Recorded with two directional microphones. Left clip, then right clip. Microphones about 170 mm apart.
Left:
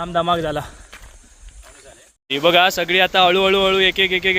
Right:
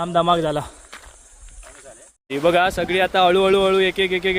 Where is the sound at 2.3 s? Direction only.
Centre (ahead or behind).